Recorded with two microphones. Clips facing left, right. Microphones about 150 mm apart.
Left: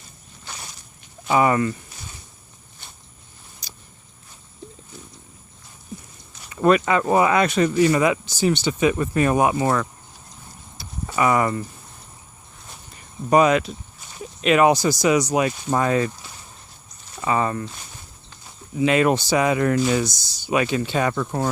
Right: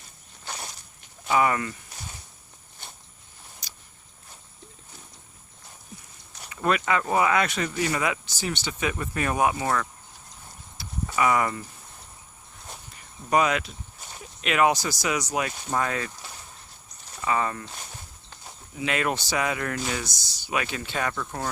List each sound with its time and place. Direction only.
1.3 s speech: 30° left (ahead or behind)
6.5 s speech: 30° left (ahead or behind)
8.3 s speech: 15° left (ahead or behind)
10.8 s clip-clop: 30° left (ahead or behind)
13.3 s speech: 30° left (ahead or behind)
14.7 s speech: 20° left (ahead or behind)
17.2 s speech: 30° left (ahead or behind)
18.8 s speech: 25° left (ahead or behind)